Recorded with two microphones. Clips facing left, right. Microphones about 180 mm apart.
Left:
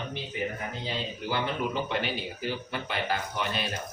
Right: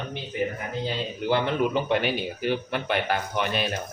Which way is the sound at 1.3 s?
60° right (ahead or behind).